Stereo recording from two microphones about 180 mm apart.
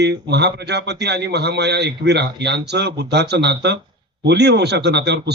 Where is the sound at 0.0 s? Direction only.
70° right (ahead or behind).